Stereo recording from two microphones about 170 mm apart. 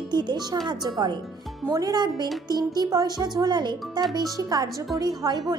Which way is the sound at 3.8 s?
Centre (ahead or behind).